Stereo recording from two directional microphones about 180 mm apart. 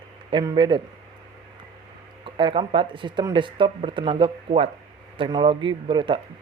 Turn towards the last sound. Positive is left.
turn(degrees=-30)  # may be behind; listen again after turning